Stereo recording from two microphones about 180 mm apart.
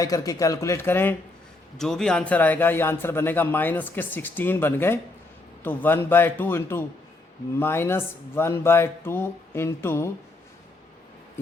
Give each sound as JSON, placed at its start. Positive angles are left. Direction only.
{"t": 0.0, "sound": "a man's voice", "side_deg": 20}